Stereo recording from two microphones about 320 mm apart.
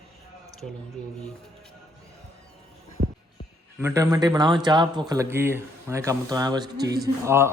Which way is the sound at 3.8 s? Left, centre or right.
Centre.